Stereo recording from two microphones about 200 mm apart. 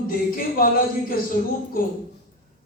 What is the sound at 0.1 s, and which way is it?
Speech, 45° left (ahead or behind).